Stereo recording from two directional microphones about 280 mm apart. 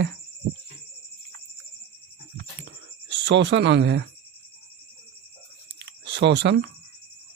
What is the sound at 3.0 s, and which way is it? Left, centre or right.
Speech, right.